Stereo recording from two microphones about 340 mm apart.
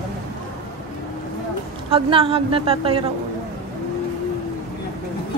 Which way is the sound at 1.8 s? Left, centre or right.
Centre.